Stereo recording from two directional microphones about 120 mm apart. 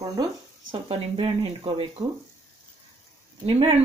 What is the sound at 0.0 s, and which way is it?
Speech, 30° right (ahead or behind).